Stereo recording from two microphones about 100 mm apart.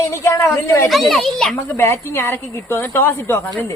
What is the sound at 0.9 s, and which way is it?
Speech, centre (ahead or behind).